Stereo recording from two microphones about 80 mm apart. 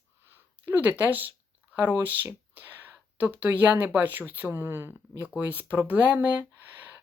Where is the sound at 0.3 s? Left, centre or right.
Right.